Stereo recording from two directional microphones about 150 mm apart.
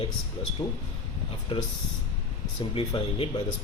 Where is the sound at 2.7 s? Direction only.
35° left (ahead or behind).